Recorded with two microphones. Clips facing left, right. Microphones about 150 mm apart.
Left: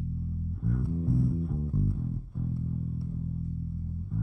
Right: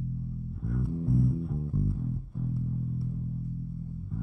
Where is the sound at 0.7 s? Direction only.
Centre (ahead or behind).